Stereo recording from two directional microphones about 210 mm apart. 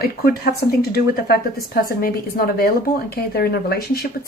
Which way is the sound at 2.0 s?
45° left (ahead or behind).